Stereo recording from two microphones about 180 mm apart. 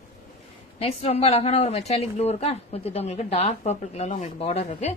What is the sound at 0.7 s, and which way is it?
A woman's voice, 35° left (ahead or behind).